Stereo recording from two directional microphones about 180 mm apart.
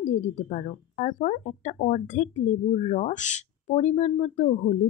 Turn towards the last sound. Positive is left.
turn(degrees=40)  # may be behind; listen again after turning